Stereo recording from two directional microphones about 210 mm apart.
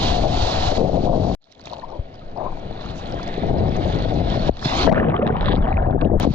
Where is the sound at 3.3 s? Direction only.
5° left (ahead or behind).